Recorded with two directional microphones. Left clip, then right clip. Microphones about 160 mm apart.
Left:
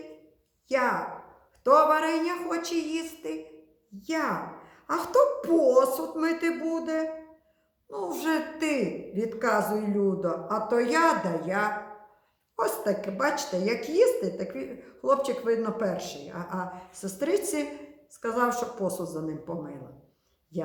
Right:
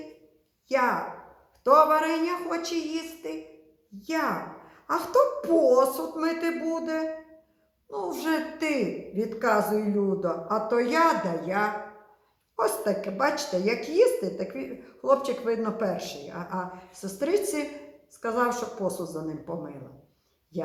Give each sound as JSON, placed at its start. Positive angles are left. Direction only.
{"t": 0.7, "sound": "a woman's voice", "side_deg": 25}